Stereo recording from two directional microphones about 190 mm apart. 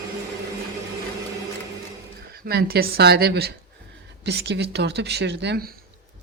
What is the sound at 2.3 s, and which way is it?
Speech, 55° right (ahead or behind).